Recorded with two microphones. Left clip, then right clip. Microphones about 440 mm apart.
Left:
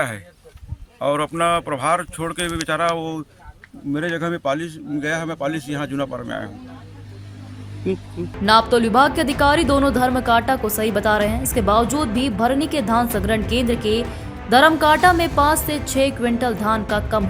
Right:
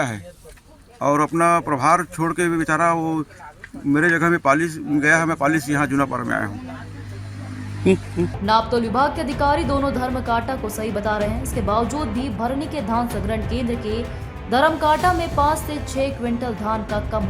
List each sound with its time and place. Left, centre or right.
1.0 s a man's voice: left
7.9 s speech: centre
8.4 s a woman's voice: centre